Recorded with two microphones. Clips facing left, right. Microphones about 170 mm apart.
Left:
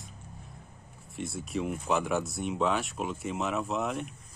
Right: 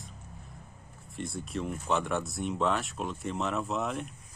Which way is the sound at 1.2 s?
Centre (ahead or behind).